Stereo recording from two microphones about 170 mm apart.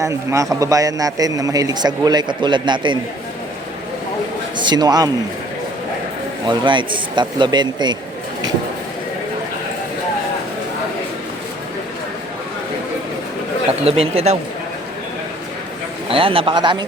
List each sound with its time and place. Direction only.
0.0 s a man's voice: 15° right (ahead or behind)
4.5 s a man's voice: 25° right (ahead or behind)
6.4 s a man's voice: 25° right (ahead or behind)
13.8 s speech: 35° right (ahead or behind)
16.0 s speech: 30° right (ahead or behind)